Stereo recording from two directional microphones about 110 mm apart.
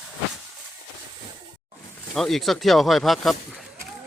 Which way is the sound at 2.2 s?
Centre (ahead or behind).